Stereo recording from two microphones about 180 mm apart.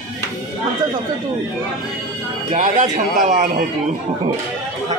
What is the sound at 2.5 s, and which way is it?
A man's voice, 45° right (ahead or behind).